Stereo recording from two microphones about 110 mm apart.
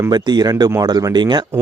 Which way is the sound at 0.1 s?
40° right (ahead or behind).